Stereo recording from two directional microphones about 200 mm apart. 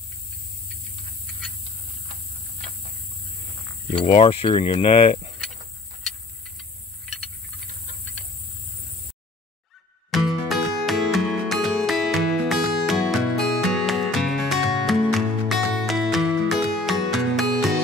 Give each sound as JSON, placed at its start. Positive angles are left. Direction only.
{"t": 4.0, "sound": "speech", "side_deg": 25}
{"t": 10.1, "sound": "music", "side_deg": 0}